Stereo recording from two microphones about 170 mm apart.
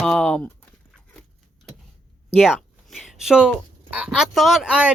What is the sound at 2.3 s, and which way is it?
Speech, centre (ahead or behind).